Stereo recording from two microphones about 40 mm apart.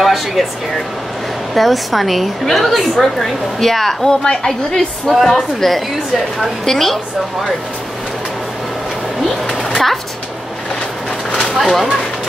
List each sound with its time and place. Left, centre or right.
0.0 s air conditioning: centre
1.5 s a woman's voice: centre
4.1 s a woman's voice: centre
11.5 s a woman's voice: centre